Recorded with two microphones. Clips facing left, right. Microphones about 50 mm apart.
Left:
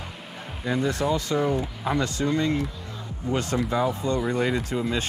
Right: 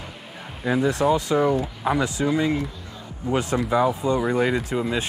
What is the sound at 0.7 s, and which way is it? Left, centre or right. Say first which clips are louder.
Speech: right 4 dB; centre.